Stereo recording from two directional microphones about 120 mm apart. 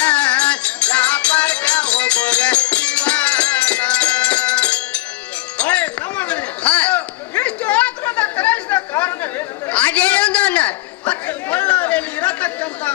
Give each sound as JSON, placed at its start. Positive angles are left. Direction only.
{"t": 0.0, "sound": "music", "side_deg": 10}
{"t": 5.5, "sound": "chatter", "side_deg": 10}